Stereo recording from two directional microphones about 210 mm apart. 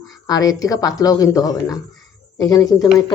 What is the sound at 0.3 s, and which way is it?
A woman's voice, 15° left (ahead or behind).